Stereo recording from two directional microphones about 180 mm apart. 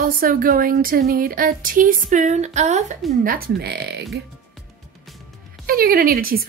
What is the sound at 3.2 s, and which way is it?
Speech, 55° right (ahead or behind).